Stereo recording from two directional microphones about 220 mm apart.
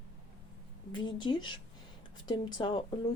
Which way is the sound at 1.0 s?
20° left (ahead or behind).